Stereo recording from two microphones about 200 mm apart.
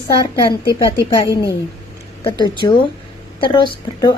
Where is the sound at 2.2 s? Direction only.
25° left (ahead or behind).